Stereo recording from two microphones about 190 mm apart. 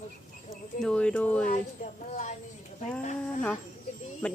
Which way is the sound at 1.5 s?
40° left (ahead or behind).